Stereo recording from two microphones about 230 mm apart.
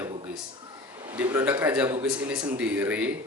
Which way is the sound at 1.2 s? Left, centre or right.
Centre.